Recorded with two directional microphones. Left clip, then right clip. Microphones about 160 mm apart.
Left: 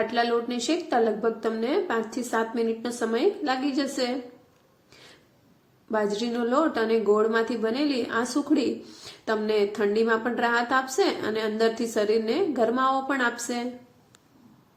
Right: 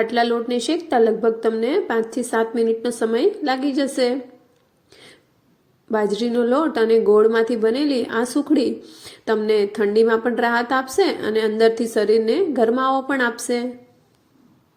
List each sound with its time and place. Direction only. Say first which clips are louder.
0.0 s a woman's voice: right 5 dB; 30° right (ahead or behind)
4.9 s a sound: right 5 dB; 30° right (ahead or behind)
5.9 s a woman's voice: right 6 dB; 30° right (ahead or behind)
8.8 s a woman's voice: right 3 dB; 20° right (ahead or behind)
9.0 s a woman's voice: right 7 dB; 30° right (ahead or behind)